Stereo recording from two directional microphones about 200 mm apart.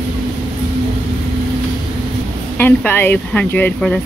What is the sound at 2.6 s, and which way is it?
Speech, 10° left (ahead or behind).